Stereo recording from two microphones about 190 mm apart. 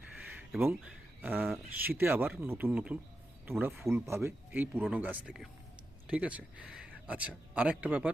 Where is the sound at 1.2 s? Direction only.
10° right (ahead or behind).